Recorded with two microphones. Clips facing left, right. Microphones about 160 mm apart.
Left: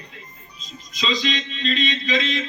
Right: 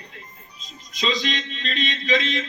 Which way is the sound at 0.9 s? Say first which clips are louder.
Left 1 dB; 60° right (ahead or behind).